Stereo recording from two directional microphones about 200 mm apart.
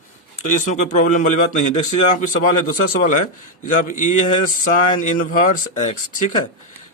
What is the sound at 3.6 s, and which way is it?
Speech, 40° left (ahead or behind).